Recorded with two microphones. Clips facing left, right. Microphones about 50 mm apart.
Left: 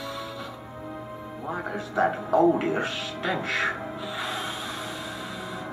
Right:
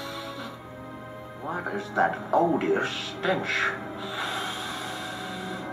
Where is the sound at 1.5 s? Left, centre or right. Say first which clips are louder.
Even; centre.